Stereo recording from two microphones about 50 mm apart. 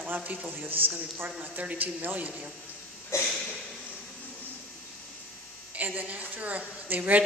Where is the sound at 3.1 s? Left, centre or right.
Left.